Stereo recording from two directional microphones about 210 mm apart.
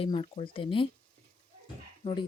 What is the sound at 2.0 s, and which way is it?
Speech, 20° left (ahead or behind).